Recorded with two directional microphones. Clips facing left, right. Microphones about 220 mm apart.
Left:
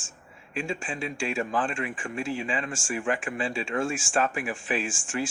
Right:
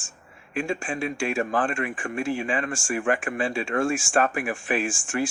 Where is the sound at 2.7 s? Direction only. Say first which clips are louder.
Right 4 dB; 70° right (ahead or behind).